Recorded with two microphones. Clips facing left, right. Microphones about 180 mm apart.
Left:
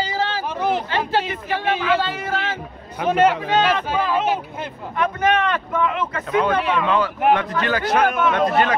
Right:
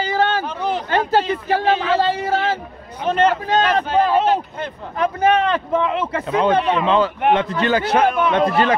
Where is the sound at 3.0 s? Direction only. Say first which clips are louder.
Even; 10° left (ahead or behind).